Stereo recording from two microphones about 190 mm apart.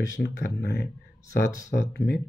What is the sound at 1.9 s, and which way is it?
Speech, 55° left (ahead or behind).